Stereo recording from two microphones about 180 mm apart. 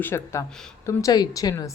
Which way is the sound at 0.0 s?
15° left (ahead or behind).